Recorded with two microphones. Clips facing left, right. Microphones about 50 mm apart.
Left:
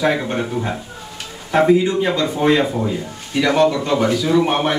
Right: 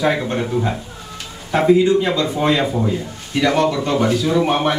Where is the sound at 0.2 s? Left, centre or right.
Centre.